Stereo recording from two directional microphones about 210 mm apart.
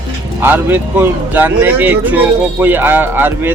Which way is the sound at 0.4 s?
10° right (ahead or behind).